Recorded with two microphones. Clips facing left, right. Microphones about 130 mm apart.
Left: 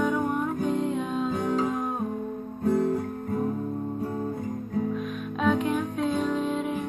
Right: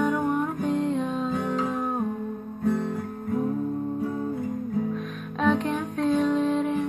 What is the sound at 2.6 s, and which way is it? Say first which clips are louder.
Guitar: left 2 dB; 40° left (ahead or behind).